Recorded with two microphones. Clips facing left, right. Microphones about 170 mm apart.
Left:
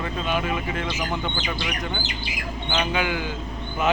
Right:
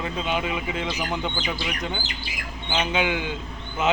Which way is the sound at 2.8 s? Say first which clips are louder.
Right 1 dB; 20° right (ahead or behind).